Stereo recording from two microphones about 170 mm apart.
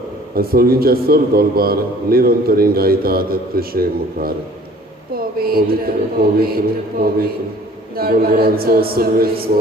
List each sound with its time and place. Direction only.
0.3 s a man's voice: 60° right (ahead or behind)
5.4 s a man's voice: 60° right (ahead or behind)